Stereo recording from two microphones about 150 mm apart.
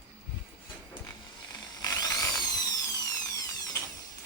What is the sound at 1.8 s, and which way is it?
Ratchet, 25° left (ahead or behind).